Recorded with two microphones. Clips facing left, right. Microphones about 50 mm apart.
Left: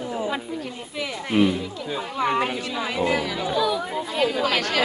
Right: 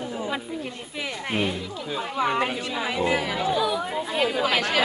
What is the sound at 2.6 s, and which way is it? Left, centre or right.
A woman's voice, centre.